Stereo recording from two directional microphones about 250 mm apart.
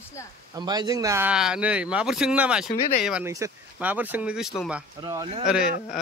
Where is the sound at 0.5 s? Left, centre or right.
Centre.